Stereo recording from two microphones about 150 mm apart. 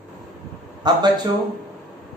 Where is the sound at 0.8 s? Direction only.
25° right (ahead or behind).